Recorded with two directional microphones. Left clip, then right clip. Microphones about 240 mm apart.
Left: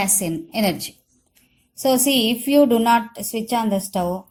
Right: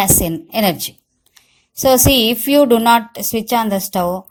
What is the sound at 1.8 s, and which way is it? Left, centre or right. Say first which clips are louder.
A woman's voice: right 6 dB; right.